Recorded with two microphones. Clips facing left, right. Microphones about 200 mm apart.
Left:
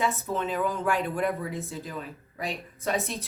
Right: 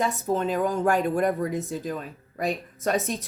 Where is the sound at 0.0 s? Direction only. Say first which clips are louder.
Right 4 dB; 40° right (ahead or behind).